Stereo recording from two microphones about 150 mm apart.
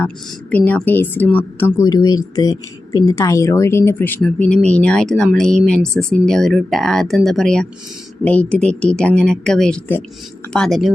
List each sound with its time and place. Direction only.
0.5 s a woman's voice: 10° left (ahead or behind)